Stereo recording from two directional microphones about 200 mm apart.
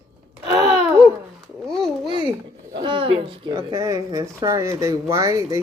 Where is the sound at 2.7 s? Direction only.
25° right (ahead or behind).